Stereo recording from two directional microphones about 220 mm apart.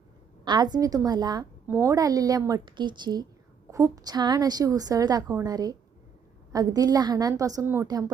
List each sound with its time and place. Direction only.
0.4 s a woman's voice: 20° right (ahead or behind)